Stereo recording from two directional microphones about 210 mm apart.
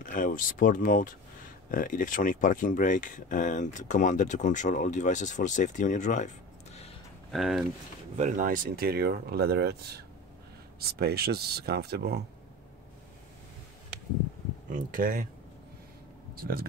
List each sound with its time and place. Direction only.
0.0 s speech: 40° left (ahead or behind)
7.2 s speech: centre (ahead or behind)
8.2 s speech: 40° right (ahead or behind)
14.7 s speech: 40° right (ahead or behind)
16.3 s speech: 45° right (ahead or behind)